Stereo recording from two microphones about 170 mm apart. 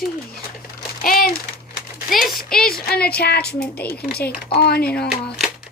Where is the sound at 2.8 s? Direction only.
65° left (ahead or behind).